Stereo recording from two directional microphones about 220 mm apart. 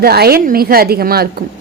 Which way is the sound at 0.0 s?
45° right (ahead or behind).